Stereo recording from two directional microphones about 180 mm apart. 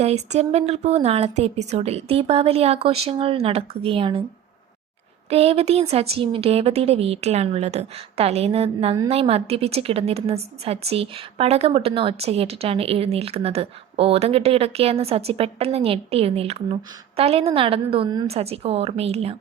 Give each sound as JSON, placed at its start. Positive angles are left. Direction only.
{"t": 0.0, "sound": "a woman's voice", "side_deg": -35}
{"t": 5.3, "sound": "a woman's voice", "side_deg": -35}